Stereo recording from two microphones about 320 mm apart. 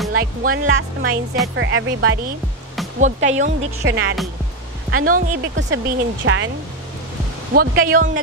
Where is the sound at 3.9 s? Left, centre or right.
Right.